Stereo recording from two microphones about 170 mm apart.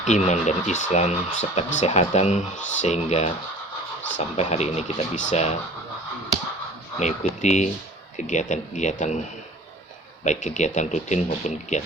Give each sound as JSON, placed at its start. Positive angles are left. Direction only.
{"t": 0.0, "sound": "speech", "side_deg": 45}
{"t": 4.4, "sound": "speech", "side_deg": 40}
{"t": 7.0, "sound": "speech", "side_deg": 45}
{"t": 10.2, "sound": "speech", "side_deg": 45}